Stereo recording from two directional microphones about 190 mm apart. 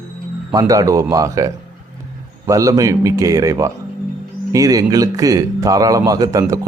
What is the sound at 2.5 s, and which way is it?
A man's voice, 20° right (ahead or behind).